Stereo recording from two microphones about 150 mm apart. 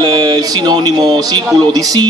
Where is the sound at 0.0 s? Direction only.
25° right (ahead or behind).